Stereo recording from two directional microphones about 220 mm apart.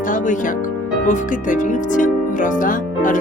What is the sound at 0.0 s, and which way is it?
Speech, 35° left (ahead or behind).